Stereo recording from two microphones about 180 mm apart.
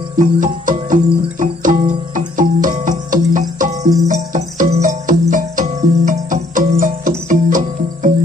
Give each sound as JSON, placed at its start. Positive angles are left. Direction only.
{"t": 0.2, "sound": "music", "side_deg": -45}